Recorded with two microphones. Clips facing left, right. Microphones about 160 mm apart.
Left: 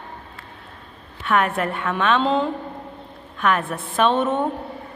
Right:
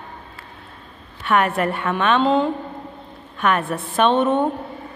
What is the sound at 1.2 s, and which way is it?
A woman's voice, centre (ahead or behind).